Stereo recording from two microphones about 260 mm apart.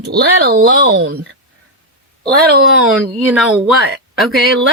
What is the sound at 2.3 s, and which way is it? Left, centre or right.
Speech, right.